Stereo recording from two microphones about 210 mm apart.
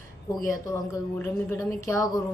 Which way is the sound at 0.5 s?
15° left (ahead or behind).